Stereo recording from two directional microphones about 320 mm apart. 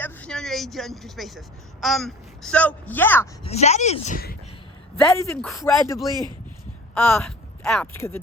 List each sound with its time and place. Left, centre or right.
0.0 s a woman's voice: centre
3.4 s speech: centre
4.9 s speech: centre